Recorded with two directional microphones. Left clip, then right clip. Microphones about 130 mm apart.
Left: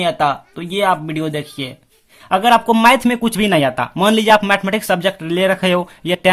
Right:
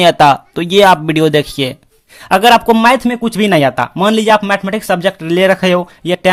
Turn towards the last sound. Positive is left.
turn(degrees=-20)  # may be behind; listen again after turning